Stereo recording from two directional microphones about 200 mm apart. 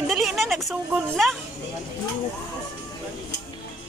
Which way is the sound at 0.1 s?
Centre (ahead or behind).